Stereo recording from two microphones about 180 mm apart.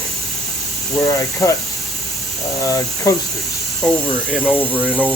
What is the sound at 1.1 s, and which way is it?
Speech, 20° left (ahead or behind).